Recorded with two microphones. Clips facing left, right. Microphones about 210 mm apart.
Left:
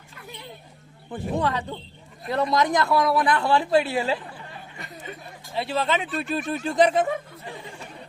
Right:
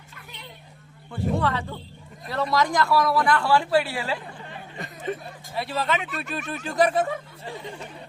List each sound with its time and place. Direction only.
1.1 s speech: 15° left (ahead or behind)
5.5 s speech: 30° left (ahead or behind)